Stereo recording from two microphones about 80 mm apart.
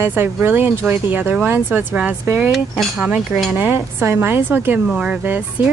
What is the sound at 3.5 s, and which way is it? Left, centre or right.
A woman's voice, right.